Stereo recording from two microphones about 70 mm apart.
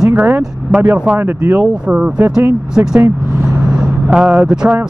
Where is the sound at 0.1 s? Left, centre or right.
Right.